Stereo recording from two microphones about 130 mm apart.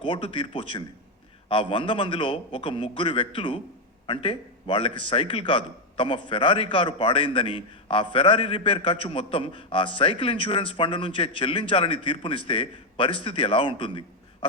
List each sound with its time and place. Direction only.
0.0 s a man's voice: 40° left (ahead or behind)